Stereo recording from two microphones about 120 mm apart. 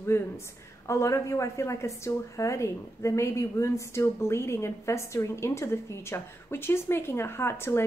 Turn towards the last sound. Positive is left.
turn(degrees=20)  # may be behind; listen again after turning